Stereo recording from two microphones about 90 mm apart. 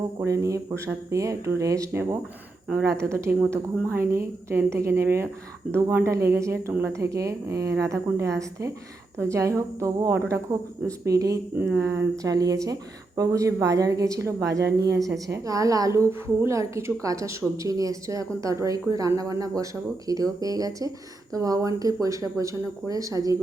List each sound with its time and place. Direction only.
0.3 s a woman's voice: 35° right (ahead or behind)
11.5 s a woman's voice: 25° right (ahead or behind); by 16.0 s 40° right (ahead or behind)
16.0 s a woman's voice: 25° right (ahead or behind)